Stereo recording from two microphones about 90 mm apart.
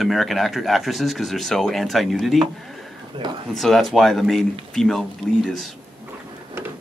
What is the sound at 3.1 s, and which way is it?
Speech, 75° right (ahead or behind).